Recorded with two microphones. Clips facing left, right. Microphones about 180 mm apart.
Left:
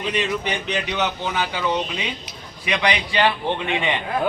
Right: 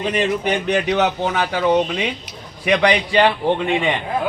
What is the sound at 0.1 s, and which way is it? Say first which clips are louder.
Speech: right 4 dB; 50° right (ahead or behind).